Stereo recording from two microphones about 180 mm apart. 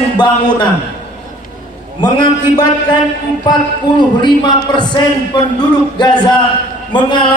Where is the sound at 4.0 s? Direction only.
25° left (ahead or behind).